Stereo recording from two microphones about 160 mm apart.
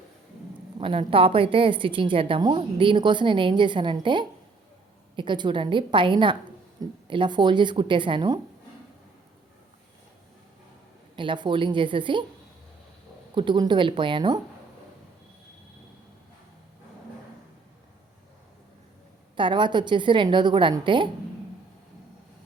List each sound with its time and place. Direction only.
0.8 s a woman's voice: 35° right (ahead or behind)
11.2 s a woman's voice: 30° right (ahead or behind)
13.3 s a woman's voice: 30° right (ahead or behind)
19.4 s a woman's voice: 30° right (ahead or behind)